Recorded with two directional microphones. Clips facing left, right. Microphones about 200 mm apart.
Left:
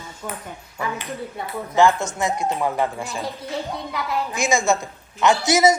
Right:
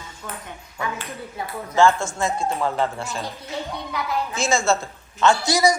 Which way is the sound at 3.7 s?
Centre (ahead or behind).